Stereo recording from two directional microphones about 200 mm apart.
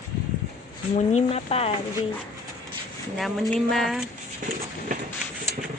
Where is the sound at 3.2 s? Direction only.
Centre (ahead or behind).